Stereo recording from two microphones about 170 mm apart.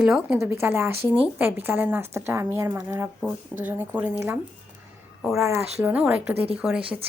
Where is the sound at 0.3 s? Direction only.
15° right (ahead or behind).